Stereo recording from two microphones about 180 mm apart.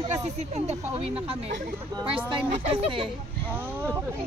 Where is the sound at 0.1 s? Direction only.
40° right (ahead or behind).